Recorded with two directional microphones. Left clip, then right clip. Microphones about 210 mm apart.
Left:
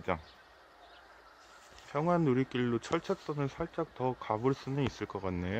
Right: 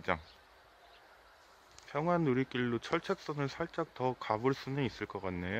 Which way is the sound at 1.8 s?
Centre (ahead or behind).